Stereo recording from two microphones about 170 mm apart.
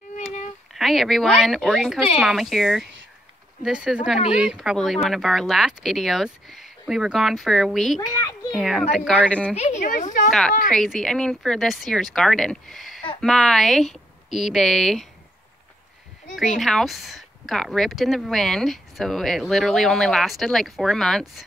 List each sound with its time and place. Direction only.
0.7 s a child's voice: centre (ahead or behind)
9.6 s a woman's voice: 45° left (ahead or behind)
10.7 s speech: centre (ahead or behind)
16.3 s speech: centre (ahead or behind)